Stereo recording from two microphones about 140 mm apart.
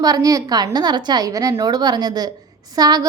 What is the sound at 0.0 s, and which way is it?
A woman's voice, 25° right (ahead or behind).